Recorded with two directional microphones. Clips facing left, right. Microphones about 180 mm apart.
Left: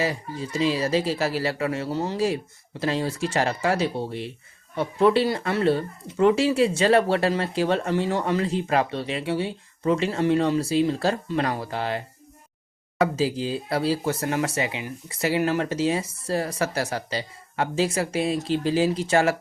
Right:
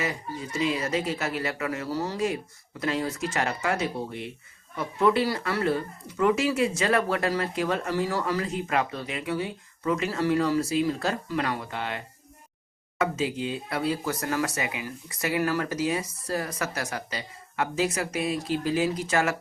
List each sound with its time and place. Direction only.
0.0 s speech: 30° left (ahead or behind)